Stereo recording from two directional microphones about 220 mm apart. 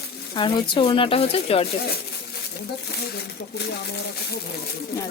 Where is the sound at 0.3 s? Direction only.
20° left (ahead or behind).